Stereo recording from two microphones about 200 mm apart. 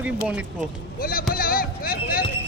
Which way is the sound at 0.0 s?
5° right (ahead or behind).